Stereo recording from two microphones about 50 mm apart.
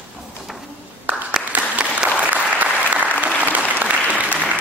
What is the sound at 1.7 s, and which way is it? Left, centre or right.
Applause, right.